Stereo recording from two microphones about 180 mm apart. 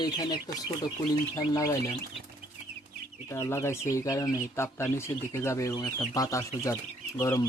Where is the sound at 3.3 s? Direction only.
15° left (ahead or behind).